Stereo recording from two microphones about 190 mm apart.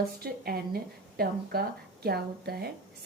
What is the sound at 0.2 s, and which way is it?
A woman's voice, 55° right (ahead or behind).